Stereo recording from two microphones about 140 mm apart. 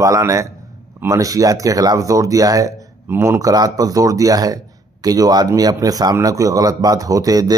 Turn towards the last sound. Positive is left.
turn(degrees=-25)  # may be behind; listen again after turning